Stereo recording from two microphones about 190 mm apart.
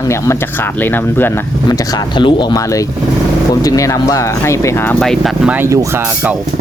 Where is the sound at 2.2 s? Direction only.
25° left (ahead or behind); by 5.8 s 10° right (ahead or behind).